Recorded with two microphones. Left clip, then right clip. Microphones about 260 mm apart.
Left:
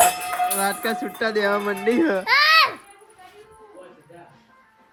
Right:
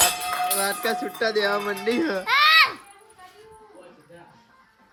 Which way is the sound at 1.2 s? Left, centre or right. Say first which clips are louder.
Left 2 dB; centre.